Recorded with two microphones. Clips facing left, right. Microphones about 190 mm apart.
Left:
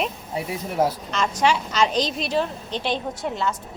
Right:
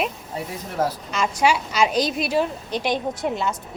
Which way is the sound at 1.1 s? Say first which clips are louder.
Right 1 dB; 10° right (ahead or behind).